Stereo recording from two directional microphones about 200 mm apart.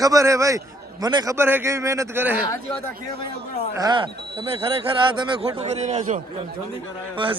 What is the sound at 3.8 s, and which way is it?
Speech, 25° right (ahead or behind).